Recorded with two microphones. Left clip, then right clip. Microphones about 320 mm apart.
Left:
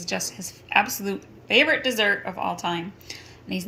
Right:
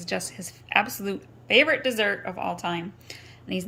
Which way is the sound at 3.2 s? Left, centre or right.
Centre.